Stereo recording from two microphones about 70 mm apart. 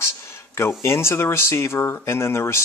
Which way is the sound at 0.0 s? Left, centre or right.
Left.